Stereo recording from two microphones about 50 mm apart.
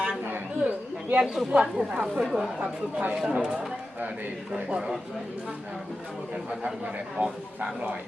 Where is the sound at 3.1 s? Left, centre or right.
Centre.